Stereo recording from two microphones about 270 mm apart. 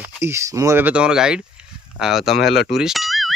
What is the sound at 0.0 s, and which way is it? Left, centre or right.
Speech, centre.